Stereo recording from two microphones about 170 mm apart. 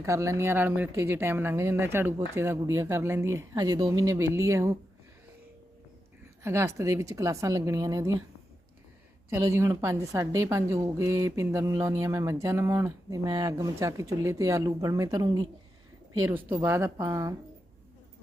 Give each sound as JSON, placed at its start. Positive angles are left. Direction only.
{"t": 0.0, "sound": "speech", "side_deg": -20}
{"t": 6.4, "sound": "a woman's voice", "side_deg": -15}
{"t": 9.3, "sound": "a woman's voice", "side_deg": -15}